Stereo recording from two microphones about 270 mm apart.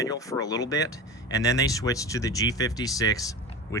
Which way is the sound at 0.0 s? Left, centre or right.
Centre.